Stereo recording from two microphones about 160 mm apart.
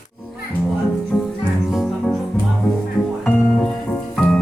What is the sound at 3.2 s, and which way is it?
Guitar, 5° left (ahead or behind).